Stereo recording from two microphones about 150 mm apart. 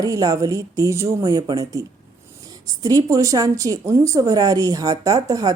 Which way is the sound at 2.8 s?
20° right (ahead or behind).